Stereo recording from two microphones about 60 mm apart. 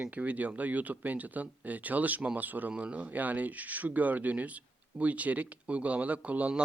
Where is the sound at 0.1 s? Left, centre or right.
Right.